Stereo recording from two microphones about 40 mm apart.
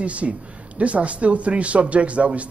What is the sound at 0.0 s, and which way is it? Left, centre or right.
Speech, right.